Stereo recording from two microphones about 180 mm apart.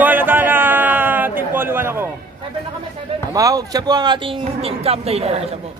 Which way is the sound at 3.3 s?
20° right (ahead or behind).